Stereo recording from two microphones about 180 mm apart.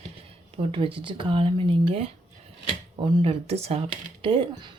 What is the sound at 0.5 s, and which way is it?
Speech, 30° right (ahead or behind).